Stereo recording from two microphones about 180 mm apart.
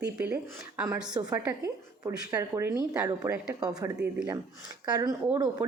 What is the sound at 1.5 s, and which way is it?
Speech, 20° right (ahead or behind).